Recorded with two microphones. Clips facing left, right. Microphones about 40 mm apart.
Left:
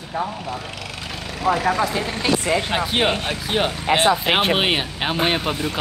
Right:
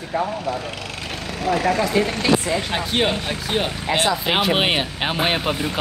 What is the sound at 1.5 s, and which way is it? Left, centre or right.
Speech, left.